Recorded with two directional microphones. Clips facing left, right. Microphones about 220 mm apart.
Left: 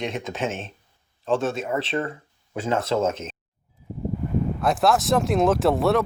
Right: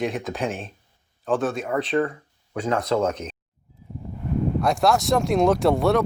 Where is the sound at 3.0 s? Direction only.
25° left (ahead or behind).